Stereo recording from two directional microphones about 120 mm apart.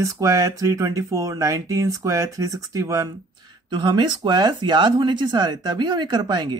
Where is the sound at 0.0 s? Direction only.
25° right (ahead or behind).